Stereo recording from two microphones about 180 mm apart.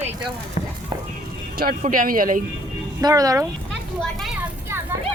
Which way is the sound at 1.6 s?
50° right (ahead or behind).